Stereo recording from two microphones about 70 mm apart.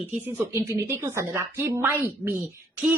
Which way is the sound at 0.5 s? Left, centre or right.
Right.